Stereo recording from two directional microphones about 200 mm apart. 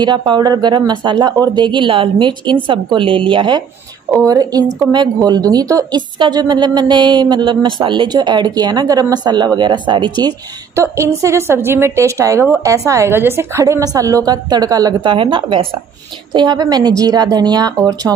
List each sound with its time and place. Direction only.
0.0 s a woman's voice: 20° right (ahead or behind)